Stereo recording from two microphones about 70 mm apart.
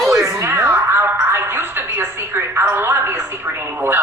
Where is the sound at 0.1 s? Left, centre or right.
Right.